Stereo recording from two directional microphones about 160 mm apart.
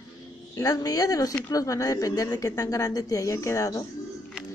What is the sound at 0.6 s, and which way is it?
A woman's voice, 20° left (ahead or behind).